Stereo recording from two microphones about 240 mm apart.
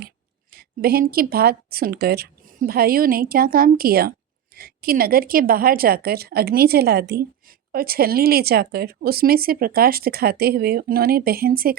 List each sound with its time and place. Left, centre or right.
0.5 s speech: right